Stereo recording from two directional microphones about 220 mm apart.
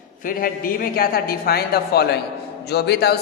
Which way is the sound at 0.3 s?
40° left (ahead or behind).